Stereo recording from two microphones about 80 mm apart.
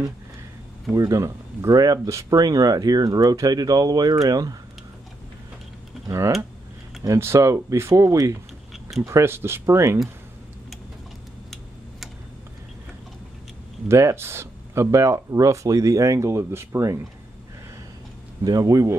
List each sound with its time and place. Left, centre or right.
0.9 s speech: right
6.0 s speech: right
13.8 s speech: right
18.4 s speech: right